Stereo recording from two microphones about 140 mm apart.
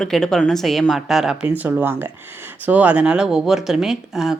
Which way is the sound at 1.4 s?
15° right (ahead or behind).